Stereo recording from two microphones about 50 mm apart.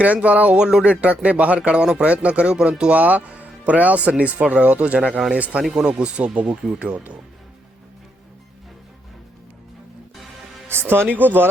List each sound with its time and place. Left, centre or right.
0.0 s speech: right
0.5 s speech: centre
5.6 s speech: centre
10.7 s speech: right